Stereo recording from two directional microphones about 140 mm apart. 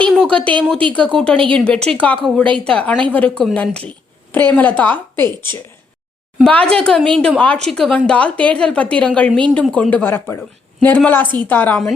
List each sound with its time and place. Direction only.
0.0 s a woman's voice: 10° left (ahead or behind)